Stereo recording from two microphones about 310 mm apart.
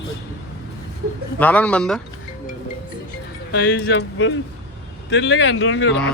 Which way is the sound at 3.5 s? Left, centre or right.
Left.